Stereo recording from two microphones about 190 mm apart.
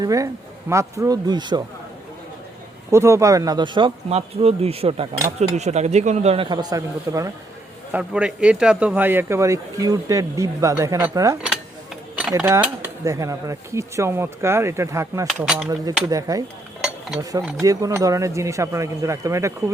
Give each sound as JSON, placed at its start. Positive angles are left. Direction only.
{"t": 0.0, "sound": "speech", "side_deg": -20}
{"t": 2.9, "sound": "speech", "side_deg": -15}
{"t": 7.9, "sound": "speech", "side_deg": -5}
{"t": 12.4, "sound": "speech", "side_deg": -10}
{"t": 15.4, "sound": "speech", "side_deg": -5}
{"t": 15.9, "sound": "speech", "side_deg": -20}
{"t": 17.6, "sound": "speech", "side_deg": -15}